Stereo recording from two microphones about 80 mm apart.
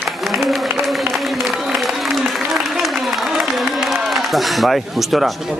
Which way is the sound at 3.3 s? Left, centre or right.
Centre.